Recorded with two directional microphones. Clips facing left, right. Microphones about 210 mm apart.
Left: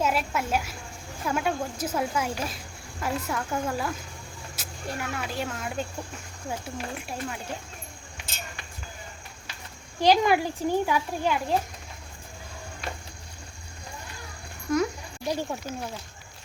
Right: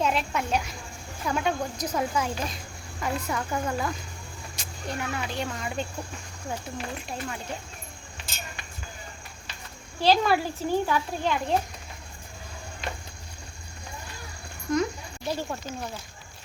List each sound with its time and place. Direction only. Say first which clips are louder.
0.0 s speech: even; 5° left (ahead or behind)
10.0 s a child's voice: left 1 dB; 15° left (ahead or behind)
14.7 s a sound: left 1 dB; 10° left (ahead or behind)